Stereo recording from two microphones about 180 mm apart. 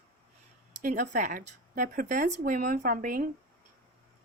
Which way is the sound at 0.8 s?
45° right (ahead or behind).